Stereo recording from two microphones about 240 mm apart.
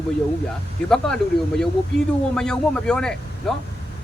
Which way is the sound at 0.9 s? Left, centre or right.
Centre.